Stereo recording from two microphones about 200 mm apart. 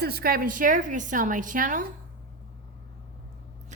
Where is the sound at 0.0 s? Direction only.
50° right (ahead or behind).